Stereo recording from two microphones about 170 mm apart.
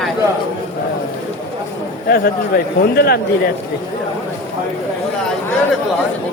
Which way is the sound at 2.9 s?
65° left (ahead or behind).